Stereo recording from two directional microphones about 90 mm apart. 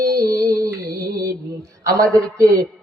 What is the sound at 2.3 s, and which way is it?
Speech, 40° right (ahead or behind).